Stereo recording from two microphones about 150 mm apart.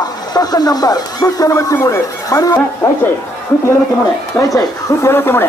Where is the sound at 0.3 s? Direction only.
25° left (ahead or behind).